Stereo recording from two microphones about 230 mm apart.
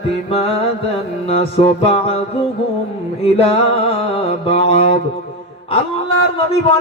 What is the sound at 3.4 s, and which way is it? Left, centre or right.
Music, left.